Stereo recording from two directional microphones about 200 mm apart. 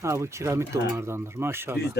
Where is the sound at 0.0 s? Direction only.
15° right (ahead or behind).